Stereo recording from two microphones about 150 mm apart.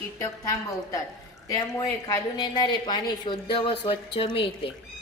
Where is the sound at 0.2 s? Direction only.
20° left (ahead or behind); by 4.3 s 35° left (ahead or behind).